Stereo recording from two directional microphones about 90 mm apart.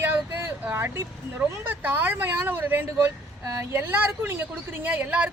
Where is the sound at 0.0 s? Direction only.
20° right (ahead or behind).